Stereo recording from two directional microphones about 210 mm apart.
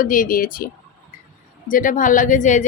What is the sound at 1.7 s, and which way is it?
Speech, 40° left (ahead or behind).